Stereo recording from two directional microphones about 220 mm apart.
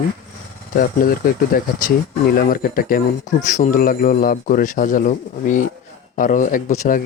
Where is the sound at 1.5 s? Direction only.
40° left (ahead or behind).